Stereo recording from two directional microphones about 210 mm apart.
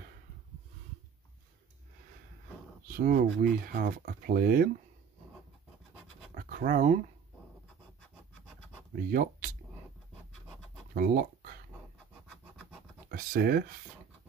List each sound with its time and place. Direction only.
3.0 s speech: 40° right (ahead or behind)
6.3 s scratch: 40° right (ahead or behind)
9.1 s speech: 40° right (ahead or behind)
11.0 s speech: 45° right (ahead or behind)
13.1 s speech: 45° right (ahead or behind)